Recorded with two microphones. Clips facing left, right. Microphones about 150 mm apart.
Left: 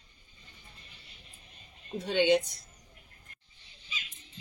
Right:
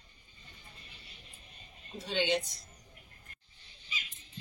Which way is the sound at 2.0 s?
50° left (ahead or behind).